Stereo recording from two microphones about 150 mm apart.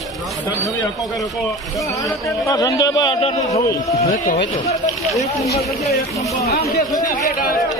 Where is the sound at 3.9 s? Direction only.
55° left (ahead or behind).